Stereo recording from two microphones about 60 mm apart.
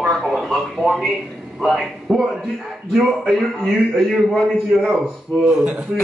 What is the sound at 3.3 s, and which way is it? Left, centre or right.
A man's voice, centre.